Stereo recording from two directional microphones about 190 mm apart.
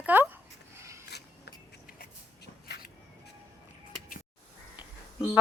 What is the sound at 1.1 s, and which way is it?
Scissors, 60° left (ahead or behind).